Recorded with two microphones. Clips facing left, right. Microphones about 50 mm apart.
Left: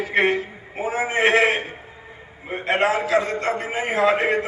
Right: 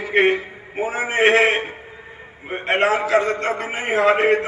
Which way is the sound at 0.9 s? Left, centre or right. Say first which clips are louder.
Right 2 dB; right.